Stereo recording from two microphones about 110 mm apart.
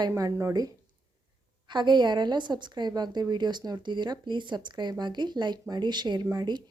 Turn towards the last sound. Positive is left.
turn(degrees=-40)  # may be behind; listen again after turning